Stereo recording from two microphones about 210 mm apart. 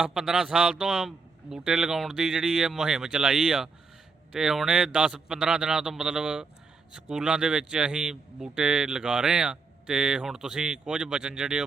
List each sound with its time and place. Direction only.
0.0 s a man's voice: centre (ahead or behind)